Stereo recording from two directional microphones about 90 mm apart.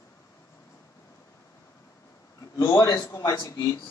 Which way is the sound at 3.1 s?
40° left (ahead or behind).